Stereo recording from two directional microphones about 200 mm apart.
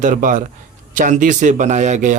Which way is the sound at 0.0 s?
40° right (ahead or behind).